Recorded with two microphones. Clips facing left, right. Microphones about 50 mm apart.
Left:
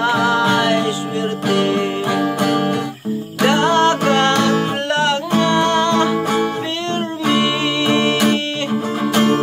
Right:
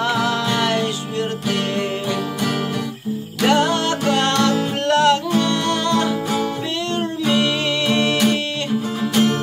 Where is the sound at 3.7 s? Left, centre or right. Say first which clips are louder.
Left 5 dB; left.